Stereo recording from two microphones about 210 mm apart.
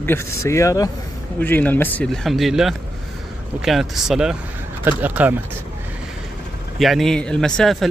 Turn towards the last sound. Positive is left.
turn(degrees=0)  # may be behind; listen again after turning